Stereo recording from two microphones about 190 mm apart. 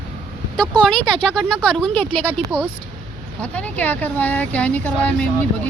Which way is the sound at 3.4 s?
5° left (ahead or behind).